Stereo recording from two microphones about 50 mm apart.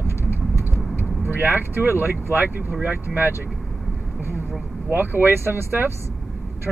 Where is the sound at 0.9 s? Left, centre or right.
Right.